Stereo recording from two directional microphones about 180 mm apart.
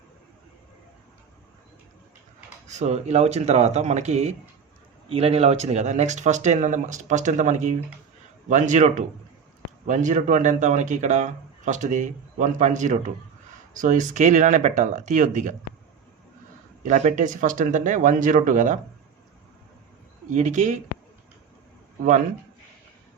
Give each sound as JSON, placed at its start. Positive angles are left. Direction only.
{"t": 2.6, "sound": "speech", "side_deg": -40}
{"t": 16.8, "sound": "speech", "side_deg": -40}
{"t": 20.3, "sound": "speech", "side_deg": -40}